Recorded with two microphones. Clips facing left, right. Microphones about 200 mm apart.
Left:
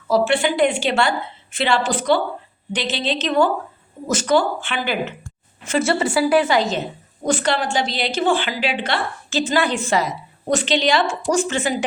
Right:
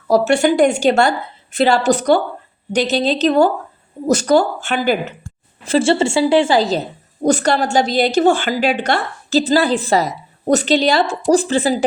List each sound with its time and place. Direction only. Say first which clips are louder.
0.1 s a woman's voice: right 4 dB; 45° right (ahead or behind)
5.6 s a woman's voice: right 5 dB; 30° right (ahead or behind)